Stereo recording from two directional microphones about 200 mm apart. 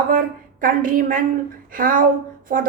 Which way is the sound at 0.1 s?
45° right (ahead or behind).